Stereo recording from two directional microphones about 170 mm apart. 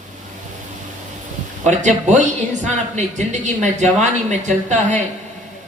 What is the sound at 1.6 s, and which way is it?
Speech, 45° right (ahead or behind).